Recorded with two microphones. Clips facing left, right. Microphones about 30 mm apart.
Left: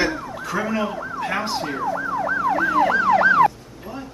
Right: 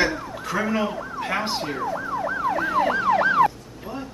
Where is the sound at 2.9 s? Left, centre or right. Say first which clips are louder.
Left 3 dB; left.